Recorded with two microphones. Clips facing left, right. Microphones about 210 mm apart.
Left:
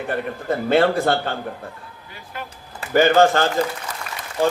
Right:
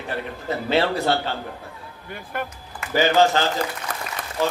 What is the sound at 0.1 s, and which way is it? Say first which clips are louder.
Speech: left 3 dB; 50° left (ahead or behind).